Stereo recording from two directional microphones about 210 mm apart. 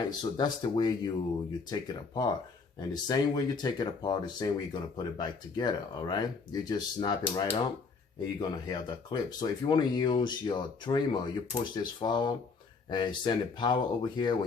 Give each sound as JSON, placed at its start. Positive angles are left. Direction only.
{"t": 0.2, "sound": "speech", "side_deg": 20}